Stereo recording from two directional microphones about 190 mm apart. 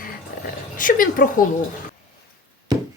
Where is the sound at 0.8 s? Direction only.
45° left (ahead or behind).